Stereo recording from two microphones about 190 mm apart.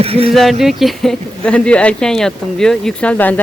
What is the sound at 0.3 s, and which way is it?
Speech, centre (ahead or behind).